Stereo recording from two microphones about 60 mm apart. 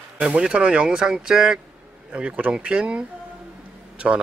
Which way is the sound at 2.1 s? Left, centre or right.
Centre.